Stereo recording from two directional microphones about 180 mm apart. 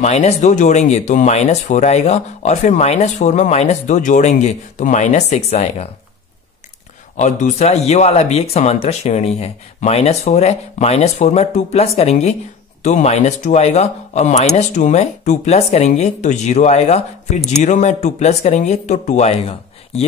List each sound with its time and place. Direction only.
0.0 s speech: 40° left (ahead or behind)
7.2 s speech: 40° left (ahead or behind)